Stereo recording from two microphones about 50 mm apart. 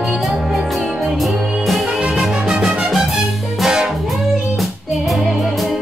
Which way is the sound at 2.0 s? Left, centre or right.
Centre.